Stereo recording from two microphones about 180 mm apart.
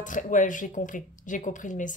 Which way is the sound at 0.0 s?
45° left (ahead or behind).